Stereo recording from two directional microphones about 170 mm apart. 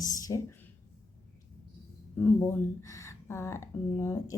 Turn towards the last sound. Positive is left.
turn(degrees=15)  # may be behind; listen again after turning